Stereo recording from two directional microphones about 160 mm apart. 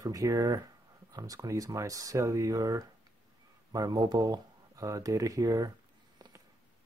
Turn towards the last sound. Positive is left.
turn(degrees=-20)  # may be behind; listen again after turning